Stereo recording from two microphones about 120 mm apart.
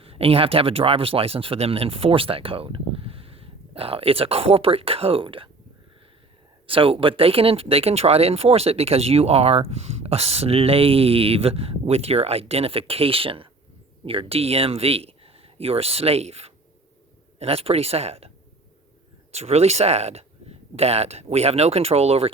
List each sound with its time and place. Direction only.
0.0 s speech: 55° right (ahead or behind)
6.7 s speech: 50° right (ahead or behind)
19.3 s speech: 60° right (ahead or behind)